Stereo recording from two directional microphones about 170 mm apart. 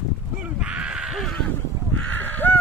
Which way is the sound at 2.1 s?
10° left (ahead or behind).